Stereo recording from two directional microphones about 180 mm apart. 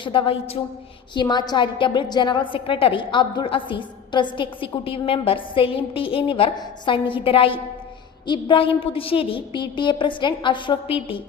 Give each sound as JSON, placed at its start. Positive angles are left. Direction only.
{"t": 0.0, "sound": "a woman's voice", "side_deg": 30}